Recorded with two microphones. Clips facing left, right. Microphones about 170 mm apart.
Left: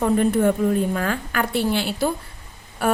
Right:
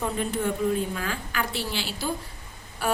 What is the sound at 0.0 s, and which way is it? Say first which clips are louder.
A woman's voice: left 9 dB; 55° left (ahead or behind).